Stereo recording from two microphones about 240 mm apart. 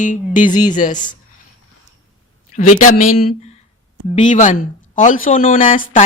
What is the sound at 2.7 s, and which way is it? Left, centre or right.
Speech, left.